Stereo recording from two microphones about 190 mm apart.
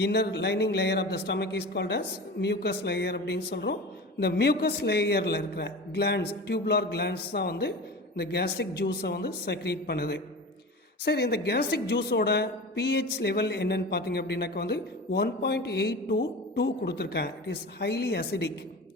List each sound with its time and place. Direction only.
0.0 s a woman's voice: 60° left (ahead or behind)